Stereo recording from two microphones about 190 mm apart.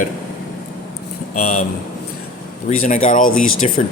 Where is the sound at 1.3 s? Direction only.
40° left (ahead or behind).